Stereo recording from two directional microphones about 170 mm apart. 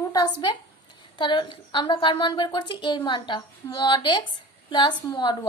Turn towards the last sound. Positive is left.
turn(degrees=25)  # may be behind; listen again after turning